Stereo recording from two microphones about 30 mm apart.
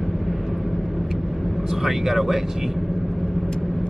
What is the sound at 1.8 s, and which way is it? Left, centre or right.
Vehicle, centre.